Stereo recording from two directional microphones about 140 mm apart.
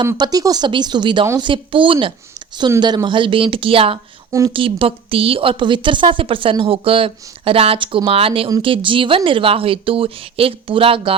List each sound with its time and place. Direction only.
0.0 s a woman's voice: 30° right (ahead or behind)